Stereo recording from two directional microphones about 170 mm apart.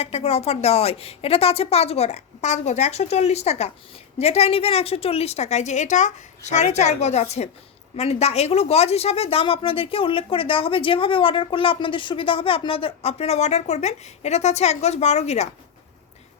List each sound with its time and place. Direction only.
0.0 s speech: 35° left (ahead or behind)